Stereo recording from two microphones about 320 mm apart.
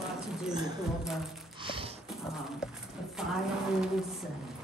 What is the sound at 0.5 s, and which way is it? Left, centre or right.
Speech, centre.